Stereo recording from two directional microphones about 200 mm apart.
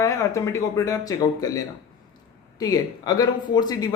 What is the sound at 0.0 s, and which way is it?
A man's voice, 15° left (ahead or behind).